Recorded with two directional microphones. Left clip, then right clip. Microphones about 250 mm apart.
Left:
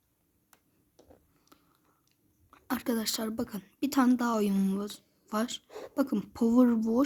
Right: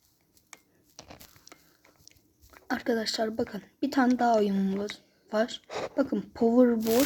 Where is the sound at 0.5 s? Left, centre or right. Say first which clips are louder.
Right 12 dB; centre.